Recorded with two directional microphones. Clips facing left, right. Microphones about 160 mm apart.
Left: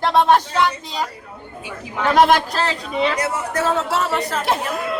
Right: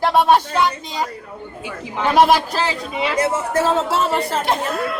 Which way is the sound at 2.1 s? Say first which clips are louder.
Even; 5° right (ahead or behind).